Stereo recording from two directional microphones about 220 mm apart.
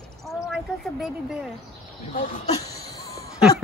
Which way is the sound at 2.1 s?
40° left (ahead or behind).